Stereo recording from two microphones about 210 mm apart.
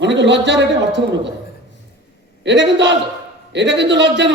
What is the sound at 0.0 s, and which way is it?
A man's voice, 55° right (ahead or behind).